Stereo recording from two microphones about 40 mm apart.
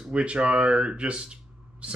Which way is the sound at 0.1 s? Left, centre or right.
Right.